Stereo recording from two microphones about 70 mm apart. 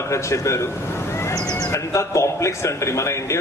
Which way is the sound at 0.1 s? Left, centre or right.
Left.